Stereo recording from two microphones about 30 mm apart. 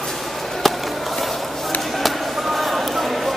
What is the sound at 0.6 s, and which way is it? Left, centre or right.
Skateboard, centre.